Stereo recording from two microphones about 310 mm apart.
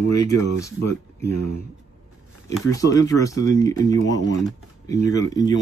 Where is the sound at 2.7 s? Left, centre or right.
Centre.